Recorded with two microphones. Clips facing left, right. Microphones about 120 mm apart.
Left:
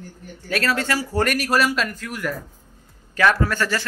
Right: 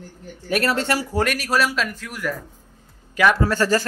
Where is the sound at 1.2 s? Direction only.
Centre (ahead or behind).